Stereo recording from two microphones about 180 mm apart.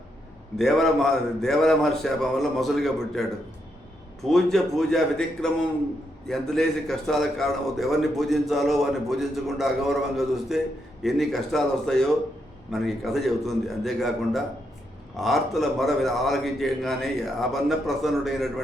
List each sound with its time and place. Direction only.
0.5 s a man's voice: centre (ahead or behind)